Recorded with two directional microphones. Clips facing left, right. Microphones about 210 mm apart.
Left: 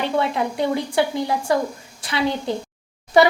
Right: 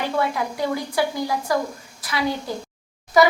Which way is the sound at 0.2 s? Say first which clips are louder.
Left 1 dB; 25° left (ahead or behind).